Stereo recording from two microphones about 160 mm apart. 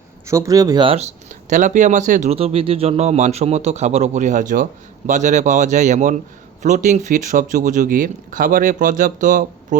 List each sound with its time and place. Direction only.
0.3 s speech: 20° right (ahead or behind)
0.9 s speech: 45° right (ahead or behind)
2.3 s speech: 40° right (ahead or behind); by 9.7 s 55° right (ahead or behind)